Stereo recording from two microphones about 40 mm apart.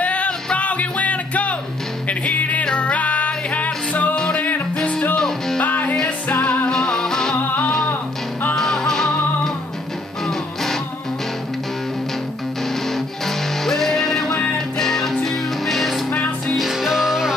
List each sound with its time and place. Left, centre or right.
0.0 s music: left
4.1 s music: left
5.1 s music: centre
5.6 s music: left
6.4 s music: left
6.7 s music: centre
7.3 s music: left
8.5 s music: centre
12.8 s music: centre
16.1 s music: left
16.5 s music: centre